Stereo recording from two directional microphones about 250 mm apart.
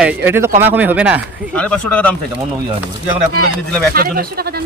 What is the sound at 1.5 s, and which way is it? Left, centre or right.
Speech, centre.